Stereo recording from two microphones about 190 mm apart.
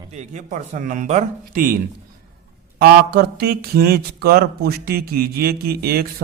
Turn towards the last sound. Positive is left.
turn(degrees=-55)  # may be behind; listen again after turning